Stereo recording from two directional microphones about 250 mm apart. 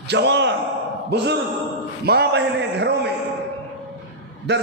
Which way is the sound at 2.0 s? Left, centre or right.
Right.